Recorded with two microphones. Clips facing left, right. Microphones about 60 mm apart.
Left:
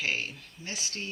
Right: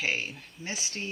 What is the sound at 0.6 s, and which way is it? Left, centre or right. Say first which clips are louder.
Speech: right 2 dB; right.